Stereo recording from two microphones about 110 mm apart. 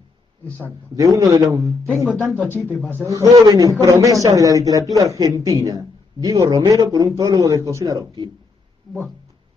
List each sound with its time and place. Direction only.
0.9 s a man's voice: 30° right (ahead or behind)
2.3 s speech: 20° left (ahead or behind)
3.1 s a man's voice: 30° right (ahead or behind)